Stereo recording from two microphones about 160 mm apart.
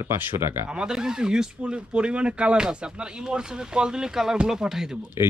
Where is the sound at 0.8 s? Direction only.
5° right (ahead or behind).